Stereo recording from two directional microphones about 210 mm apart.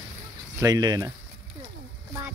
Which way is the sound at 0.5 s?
15° right (ahead or behind).